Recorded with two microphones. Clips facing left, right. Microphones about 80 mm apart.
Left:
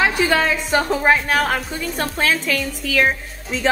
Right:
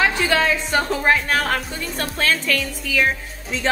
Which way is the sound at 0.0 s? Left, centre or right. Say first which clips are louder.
Left 1 dB; centre.